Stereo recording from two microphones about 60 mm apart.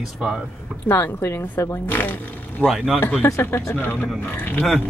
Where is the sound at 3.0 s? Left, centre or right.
Left.